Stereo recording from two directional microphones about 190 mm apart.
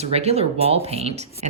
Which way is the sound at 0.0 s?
35° right (ahead or behind).